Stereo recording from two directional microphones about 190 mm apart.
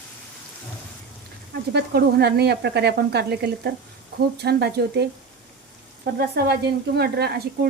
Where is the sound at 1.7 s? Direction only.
60° right (ahead or behind).